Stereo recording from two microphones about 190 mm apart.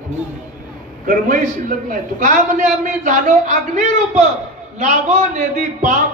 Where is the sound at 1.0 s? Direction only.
45° right (ahead or behind).